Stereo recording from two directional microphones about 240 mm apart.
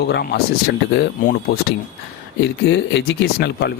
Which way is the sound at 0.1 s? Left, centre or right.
Left.